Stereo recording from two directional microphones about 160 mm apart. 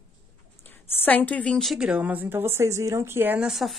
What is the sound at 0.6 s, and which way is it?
A woman's voice, 10° left (ahead or behind).